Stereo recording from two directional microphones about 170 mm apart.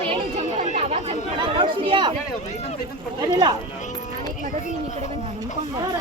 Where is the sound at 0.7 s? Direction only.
40° right (ahead or behind).